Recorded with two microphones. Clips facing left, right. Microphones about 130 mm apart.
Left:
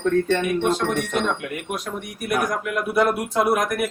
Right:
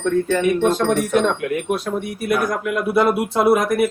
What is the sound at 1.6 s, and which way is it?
Speech, 30° right (ahead or behind).